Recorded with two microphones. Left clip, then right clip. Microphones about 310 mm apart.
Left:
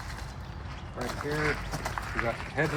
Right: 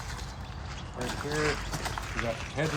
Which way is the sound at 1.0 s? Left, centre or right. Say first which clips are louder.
Even; centre.